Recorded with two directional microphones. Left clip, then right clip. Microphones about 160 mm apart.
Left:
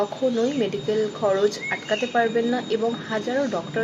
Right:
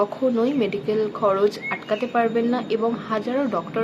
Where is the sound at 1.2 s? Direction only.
15° right (ahead or behind).